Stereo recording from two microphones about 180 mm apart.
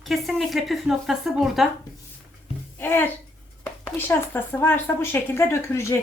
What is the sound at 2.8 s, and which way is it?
A child's voice, 10° left (ahead or behind).